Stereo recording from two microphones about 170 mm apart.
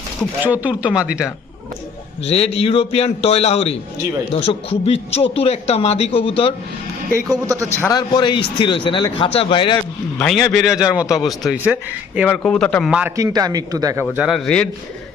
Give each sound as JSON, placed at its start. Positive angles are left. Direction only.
{"t": 0.4, "sound": "a man's voice", "side_deg": -10}
{"t": 2.2, "sound": "speech", "side_deg": 35}
{"t": 7.3, "sound": "a man's voice", "side_deg": -20}
{"t": 7.8, "sound": "speech", "side_deg": 20}
{"t": 10.2, "sound": "a man's voice", "side_deg": 5}
{"t": 12.3, "sound": "a man's voice", "side_deg": 5}
{"t": 12.9, "sound": "a man's voice", "side_deg": -5}
{"t": 13.1, "sound": "a man's voice", "side_deg": -20}